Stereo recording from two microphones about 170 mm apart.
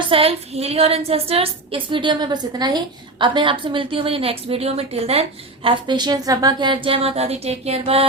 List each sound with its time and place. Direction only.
0.1 s a woman's voice: 35° right (ahead or behind)